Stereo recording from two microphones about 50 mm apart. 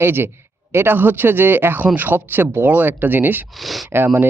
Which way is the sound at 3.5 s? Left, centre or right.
Centre.